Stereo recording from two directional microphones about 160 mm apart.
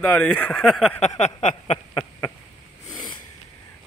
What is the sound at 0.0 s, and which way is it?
Speech, 10° left (ahead or behind).